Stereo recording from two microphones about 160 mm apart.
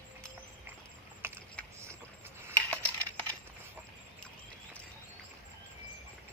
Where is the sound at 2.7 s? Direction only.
10° left (ahead or behind).